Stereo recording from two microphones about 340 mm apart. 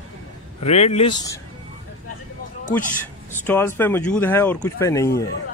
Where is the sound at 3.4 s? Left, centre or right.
Centre.